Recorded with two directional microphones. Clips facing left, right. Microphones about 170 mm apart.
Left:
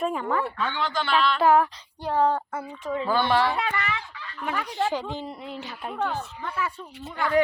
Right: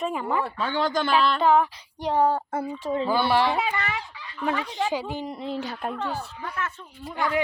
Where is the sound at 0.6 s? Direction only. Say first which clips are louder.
Right 3 dB; 40° right (ahead or behind).